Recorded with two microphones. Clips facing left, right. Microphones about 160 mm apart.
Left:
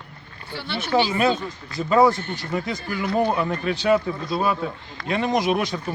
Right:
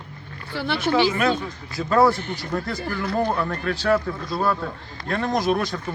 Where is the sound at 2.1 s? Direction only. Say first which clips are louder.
Even; 10° right (ahead or behind).